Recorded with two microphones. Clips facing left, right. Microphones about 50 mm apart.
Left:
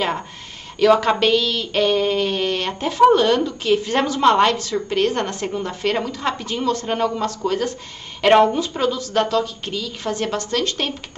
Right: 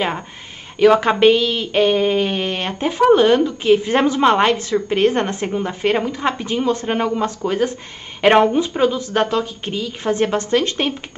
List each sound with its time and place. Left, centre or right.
0.7 s speech: right